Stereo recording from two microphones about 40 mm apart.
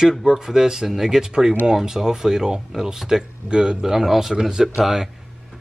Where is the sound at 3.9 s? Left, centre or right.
Centre.